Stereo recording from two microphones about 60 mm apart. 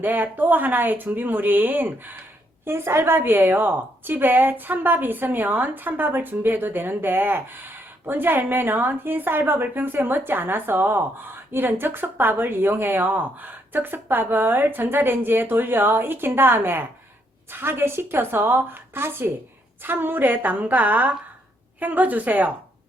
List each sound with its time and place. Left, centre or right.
0.0 s a woman's voice: right
2.6 s a woman's voice: right